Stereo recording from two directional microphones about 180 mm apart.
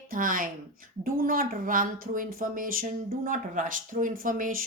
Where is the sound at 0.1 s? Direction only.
50° right (ahead or behind).